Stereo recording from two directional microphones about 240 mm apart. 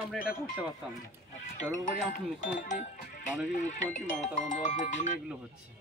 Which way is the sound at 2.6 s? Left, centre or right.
Left.